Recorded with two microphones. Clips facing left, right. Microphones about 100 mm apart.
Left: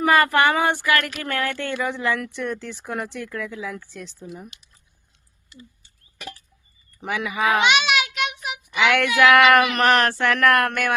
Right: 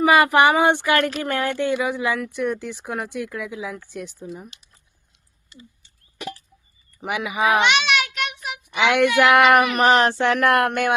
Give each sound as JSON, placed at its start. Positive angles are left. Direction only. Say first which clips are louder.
{"t": 0.0, "sound": "speech", "louder": "right 2 dB", "side_deg": -15}
{"t": 7.0, "sound": "speech", "louder": "right 1 dB", "side_deg": -10}
{"t": 7.6, "sound": "child singing", "louder": "even", "side_deg": 5}
{"t": 8.7, "sound": "speech", "louder": "right 2 dB", "side_deg": -20}
{"t": 9.8, "sound": "a sound", "louder": "right 2 dB", "side_deg": -20}